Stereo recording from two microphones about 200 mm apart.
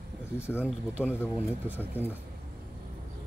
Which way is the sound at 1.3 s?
10° right (ahead or behind).